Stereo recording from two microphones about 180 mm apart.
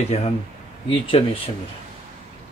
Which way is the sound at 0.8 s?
30° left (ahead or behind).